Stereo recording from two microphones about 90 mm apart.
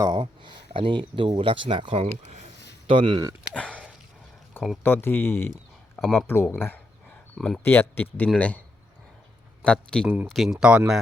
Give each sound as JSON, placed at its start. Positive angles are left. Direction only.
{"t": 0.2, "sound": "speech", "side_deg": -65}
{"t": 3.5, "sound": "speech", "side_deg": 15}
{"t": 4.8, "sound": "speech", "side_deg": 25}
{"t": 6.0, "sound": "speech", "side_deg": 0}
{"t": 6.2, "sound": "a sound", "side_deg": 25}
{"t": 7.3, "sound": "speech", "side_deg": 5}
{"t": 7.6, "sound": "speech", "side_deg": 25}
{"t": 9.6, "sound": "speech", "side_deg": 10}